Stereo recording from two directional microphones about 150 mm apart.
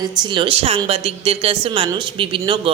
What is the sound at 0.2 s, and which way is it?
Speech, 30° right (ahead or behind).